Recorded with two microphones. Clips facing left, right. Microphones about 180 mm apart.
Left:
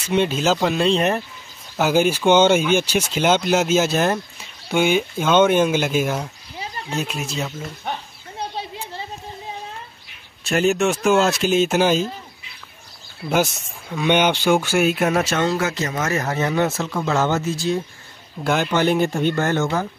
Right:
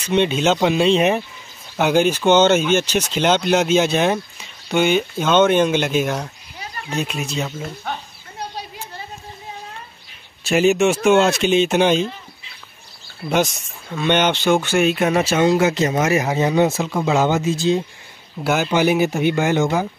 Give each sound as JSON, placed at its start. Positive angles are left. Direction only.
{"t": 0.0, "sound": "speech", "side_deg": 5}
{"t": 10.4, "sound": "speech", "side_deg": 0}
{"t": 13.3, "sound": "speech", "side_deg": 5}
{"t": 15.4, "sound": "speech", "side_deg": -20}
{"t": 18.4, "sound": "speech", "side_deg": -5}